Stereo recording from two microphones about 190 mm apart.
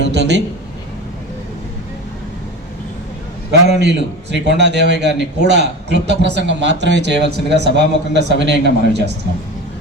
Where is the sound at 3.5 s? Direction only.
60° right (ahead or behind).